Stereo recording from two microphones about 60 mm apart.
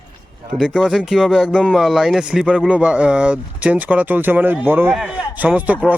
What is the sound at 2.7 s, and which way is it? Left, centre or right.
Speech, centre.